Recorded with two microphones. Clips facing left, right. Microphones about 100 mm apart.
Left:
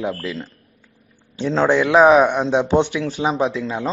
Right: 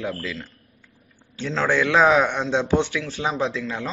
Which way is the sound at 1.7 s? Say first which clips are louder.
Left 5 dB; 20° left (ahead or behind).